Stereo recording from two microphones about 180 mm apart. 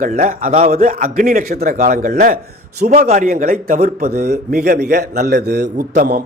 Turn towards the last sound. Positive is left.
turn(degrees=-55)  # may be behind; listen again after turning